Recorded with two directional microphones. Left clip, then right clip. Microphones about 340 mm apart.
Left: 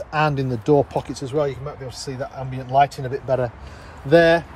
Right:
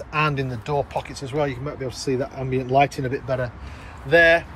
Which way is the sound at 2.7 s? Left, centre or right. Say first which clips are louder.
Left 2 dB; left.